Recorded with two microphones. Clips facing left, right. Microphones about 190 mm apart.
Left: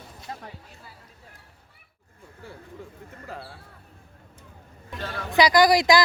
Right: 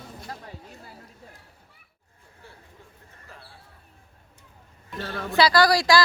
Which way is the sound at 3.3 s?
90° left.